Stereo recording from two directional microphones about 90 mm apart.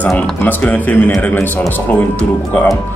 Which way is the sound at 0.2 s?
15° left (ahead or behind).